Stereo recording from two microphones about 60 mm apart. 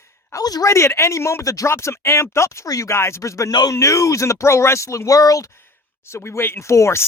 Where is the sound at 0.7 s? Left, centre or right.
Left.